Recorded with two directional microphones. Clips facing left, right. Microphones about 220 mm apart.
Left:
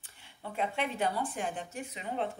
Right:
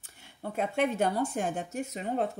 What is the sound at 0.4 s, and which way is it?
Speech, 45° right (ahead or behind).